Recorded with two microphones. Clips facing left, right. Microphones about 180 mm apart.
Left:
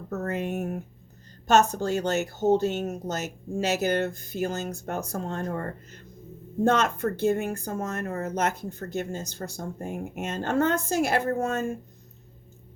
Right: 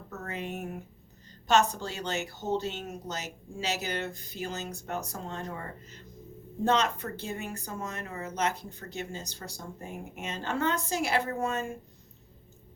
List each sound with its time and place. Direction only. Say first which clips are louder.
0.1 s speech: left 8 dB; 50° left (ahead or behind)